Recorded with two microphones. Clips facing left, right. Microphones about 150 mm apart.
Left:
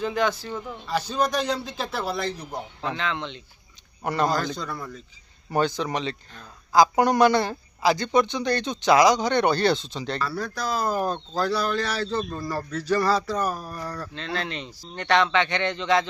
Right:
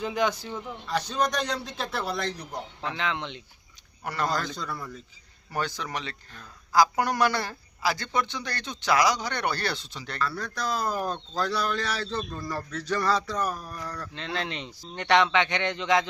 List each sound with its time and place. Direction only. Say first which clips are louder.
0.0 s speech: left 2 dB; 15° right (ahead or behind)
0.5 s speech: left 2 dB; 5° left (ahead or behind)
3.0 s speech: left 1 dB; 15° right (ahead or behind)
4.0 s speech: left 6 dB; 20° left (ahead or behind)
4.3 s speech: left 4 dB; centre (ahead or behind)
5.5 s speech: left 7 dB; 20° left (ahead or behind)
10.2 s speech: right 1 dB; 5° left (ahead or behind)
14.2 s speech: left 1 dB; 20° right (ahead or behind)